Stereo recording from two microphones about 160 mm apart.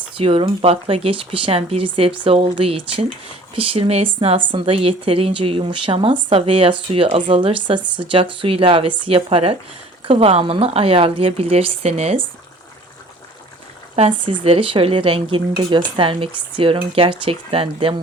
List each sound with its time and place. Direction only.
0.2 s speech: 35° right (ahead or behind)
13.9 s speech: 40° right (ahead or behind)